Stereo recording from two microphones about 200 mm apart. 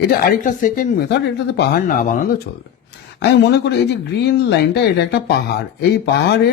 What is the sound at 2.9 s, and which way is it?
Speech, 55° left (ahead or behind).